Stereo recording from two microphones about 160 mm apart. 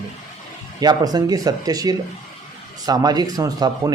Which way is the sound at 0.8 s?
25° right (ahead or behind).